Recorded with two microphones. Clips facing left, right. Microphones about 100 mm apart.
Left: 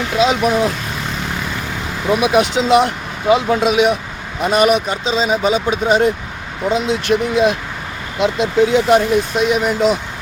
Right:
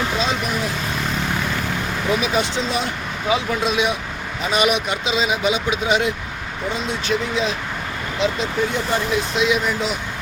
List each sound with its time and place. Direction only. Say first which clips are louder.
0.2 s speech: left 8 dB; 75° left (ahead or behind)
2.2 s speech: left 7 dB; 70° left (ahead or behind)
4.5 s speech: left 5 dB; 45° left (ahead or behind)
6.7 s speech: left 7 dB; 80° left; by 7.5 s 60° left (ahead or behind)
8.2 s speech: left 7 dB; 70° left (ahead or behind)
9.3 s speech: left 4 dB; 50° left (ahead or behind)